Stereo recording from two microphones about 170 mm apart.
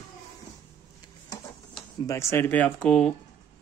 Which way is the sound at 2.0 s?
15° left (ahead or behind).